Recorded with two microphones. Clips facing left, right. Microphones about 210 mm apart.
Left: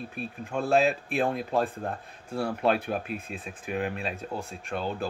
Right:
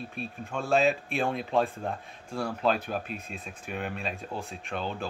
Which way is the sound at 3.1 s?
5° left (ahead or behind).